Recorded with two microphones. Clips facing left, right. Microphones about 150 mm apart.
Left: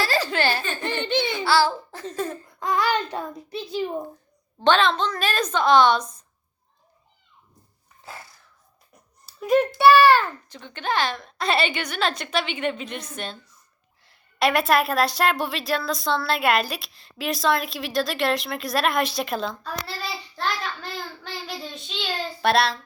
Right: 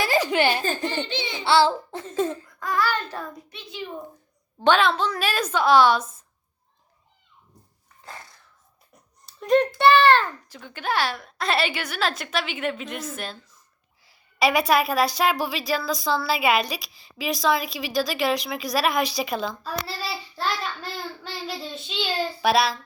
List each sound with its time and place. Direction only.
0.0 s giggle: 15° right (ahead or behind)
0.8 s a child's voice: 60° left (ahead or behind)
1.5 s a child's voice: 25° right (ahead or behind)
2.6 s child singing: 20° left (ahead or behind)
3.5 s a child's voice: 35° left (ahead or behind)
4.6 s a woman's voice: 10° right (ahead or behind)
8.0 s dog: 5° left (ahead or behind)
8.9 s a child's voice: 5° left (ahead or behind)
10.5 s a woman's voice: 5° right (ahead or behind)